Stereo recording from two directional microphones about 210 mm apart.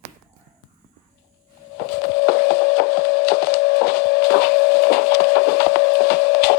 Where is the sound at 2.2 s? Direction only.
50° left (ahead or behind).